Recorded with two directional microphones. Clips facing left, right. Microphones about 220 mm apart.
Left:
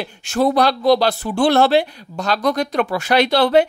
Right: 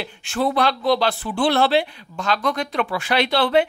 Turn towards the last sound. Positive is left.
turn(degrees=40)  # may be behind; listen again after turning